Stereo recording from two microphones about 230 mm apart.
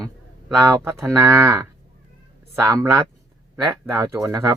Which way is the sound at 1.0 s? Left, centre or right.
Centre.